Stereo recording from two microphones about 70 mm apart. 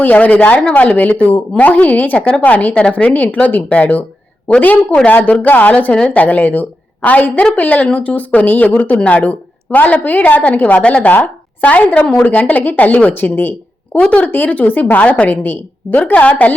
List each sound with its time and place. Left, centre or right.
0.0 s a woman's voice: left
5.0 s a woman's voice: left